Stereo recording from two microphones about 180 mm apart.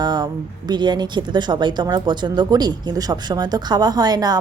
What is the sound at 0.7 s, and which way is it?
A woman's voice, 25° right (ahead or behind).